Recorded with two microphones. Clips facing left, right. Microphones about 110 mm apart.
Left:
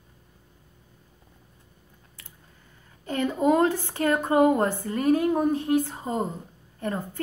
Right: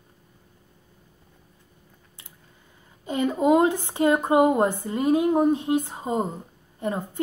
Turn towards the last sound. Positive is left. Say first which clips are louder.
# right 2 dB
turn(degrees=-15)  # may be behind; listen again after turning